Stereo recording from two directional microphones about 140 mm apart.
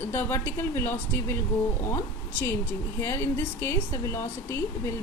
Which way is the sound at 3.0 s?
20° left (ahead or behind).